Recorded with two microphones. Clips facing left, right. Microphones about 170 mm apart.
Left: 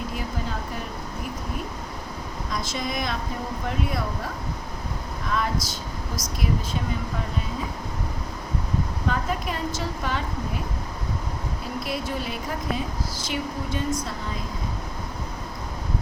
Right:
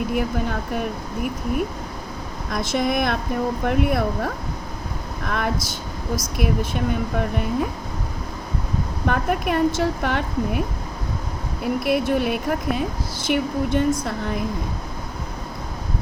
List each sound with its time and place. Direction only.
0.1 s speech: 60° right (ahead or behind)
2.7 s speech: 60° right (ahead or behind)
9.0 s speech: 60° right (ahead or behind)
11.6 s speech: 60° right (ahead or behind)